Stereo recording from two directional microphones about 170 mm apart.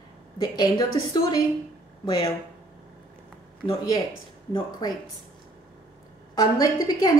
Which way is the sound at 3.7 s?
20° left (ahead or behind).